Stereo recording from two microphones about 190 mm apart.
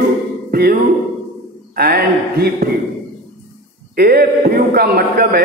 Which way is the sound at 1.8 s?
55° right (ahead or behind).